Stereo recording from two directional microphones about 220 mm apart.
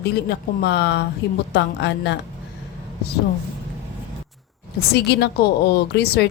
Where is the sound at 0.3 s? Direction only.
50° left (ahead or behind).